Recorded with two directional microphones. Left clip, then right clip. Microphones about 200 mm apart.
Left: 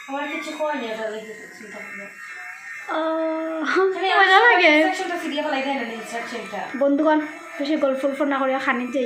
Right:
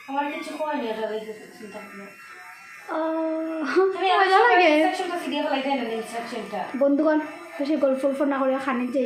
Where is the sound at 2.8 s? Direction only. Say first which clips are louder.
Left 3 dB; 10° right (ahead or behind).